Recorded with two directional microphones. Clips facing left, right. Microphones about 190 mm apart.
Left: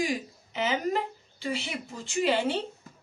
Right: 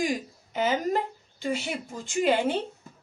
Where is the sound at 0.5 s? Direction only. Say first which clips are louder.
Right 2 dB; 45° right (ahead or behind).